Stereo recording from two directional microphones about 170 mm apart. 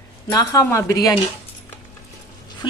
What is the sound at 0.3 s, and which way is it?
Speech, 20° left (ahead or behind).